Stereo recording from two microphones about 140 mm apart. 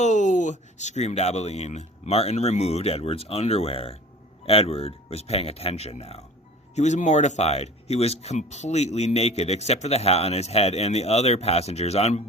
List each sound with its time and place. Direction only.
0.0 s speech: 60° left (ahead or behind)